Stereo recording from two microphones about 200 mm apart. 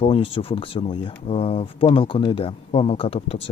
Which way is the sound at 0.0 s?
30° left (ahead or behind).